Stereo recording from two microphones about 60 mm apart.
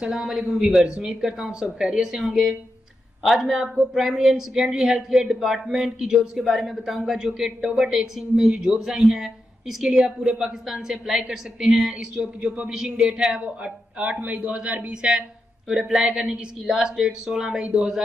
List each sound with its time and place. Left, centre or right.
0.0 s a woman's voice: centre
12.2 s a woman's voice: centre
15.7 s a woman's voice: centre